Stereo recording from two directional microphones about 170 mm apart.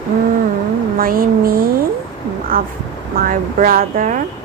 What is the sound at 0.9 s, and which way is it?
Speech, 60° right (ahead or behind).